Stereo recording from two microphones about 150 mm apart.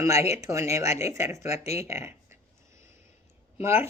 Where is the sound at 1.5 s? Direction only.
45° left (ahead or behind).